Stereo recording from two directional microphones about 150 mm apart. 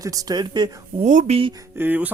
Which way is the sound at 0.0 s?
25° right (ahead or behind).